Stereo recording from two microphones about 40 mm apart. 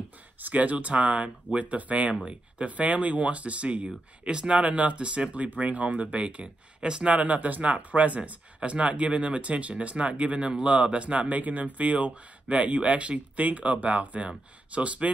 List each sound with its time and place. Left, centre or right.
0.4 s speech: right